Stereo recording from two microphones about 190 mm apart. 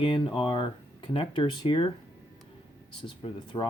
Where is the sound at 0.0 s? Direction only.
25° left (ahead or behind).